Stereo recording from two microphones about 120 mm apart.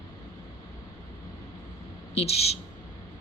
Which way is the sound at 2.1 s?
60° left (ahead or behind).